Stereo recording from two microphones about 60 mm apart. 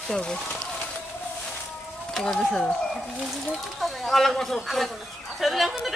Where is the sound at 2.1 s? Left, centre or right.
Centre.